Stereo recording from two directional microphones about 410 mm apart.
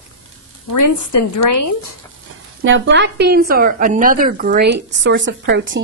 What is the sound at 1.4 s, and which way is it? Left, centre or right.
Speech, left.